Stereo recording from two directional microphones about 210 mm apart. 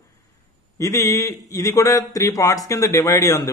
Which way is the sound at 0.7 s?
15° left (ahead or behind).